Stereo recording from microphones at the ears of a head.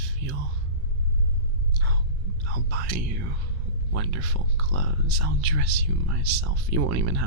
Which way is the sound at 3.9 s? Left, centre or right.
Right.